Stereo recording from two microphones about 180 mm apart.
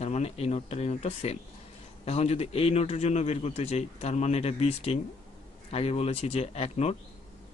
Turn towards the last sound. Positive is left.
turn(degrees=35)  # may be behind; listen again after turning